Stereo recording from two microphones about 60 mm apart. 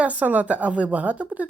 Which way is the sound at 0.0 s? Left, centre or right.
Right.